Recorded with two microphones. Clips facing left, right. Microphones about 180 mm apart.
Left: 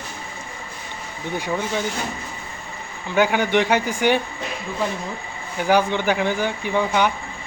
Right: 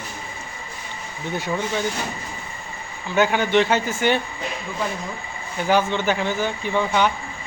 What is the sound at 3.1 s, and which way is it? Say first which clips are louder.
Speech: even; 10° left (ahead or behind).